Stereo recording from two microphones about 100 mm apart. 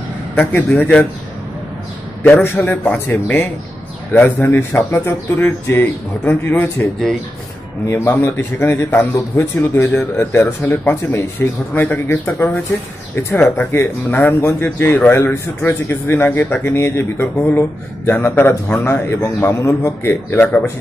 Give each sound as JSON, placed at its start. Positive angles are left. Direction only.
{"t": 0.4, "sound": "a man's voice", "side_deg": 20}
{"t": 2.4, "sound": "a man's voice", "side_deg": 20}
{"t": 7.8, "sound": "a man's voice", "side_deg": 30}
{"t": 20.4, "sound": "speech", "side_deg": 10}